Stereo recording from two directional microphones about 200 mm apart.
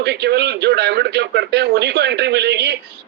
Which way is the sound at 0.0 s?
55° right (ahead or behind).